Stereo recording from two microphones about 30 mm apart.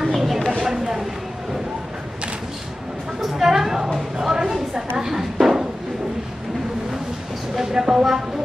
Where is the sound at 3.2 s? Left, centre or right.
Centre.